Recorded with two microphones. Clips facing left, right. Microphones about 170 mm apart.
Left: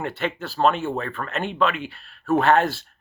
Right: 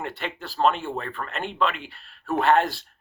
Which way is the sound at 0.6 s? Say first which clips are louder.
Left 2 dB; 55° left (ahead or behind).